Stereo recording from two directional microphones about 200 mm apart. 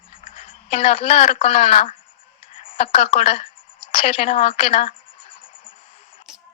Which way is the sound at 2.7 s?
30° left (ahead or behind).